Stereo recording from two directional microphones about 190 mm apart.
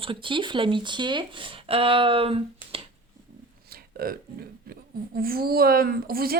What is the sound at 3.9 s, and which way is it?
A woman's voice, 50° right (ahead or behind).